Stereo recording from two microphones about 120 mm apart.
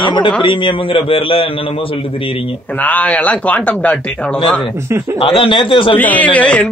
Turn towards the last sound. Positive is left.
turn(degrees=10)  # may be behind; listen again after turning